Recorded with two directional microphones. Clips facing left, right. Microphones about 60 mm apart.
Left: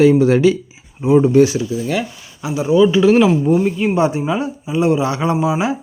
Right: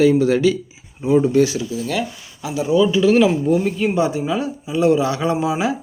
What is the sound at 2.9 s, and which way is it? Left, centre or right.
Speech, left.